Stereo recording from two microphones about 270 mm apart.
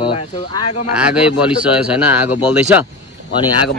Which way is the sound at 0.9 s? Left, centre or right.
Centre.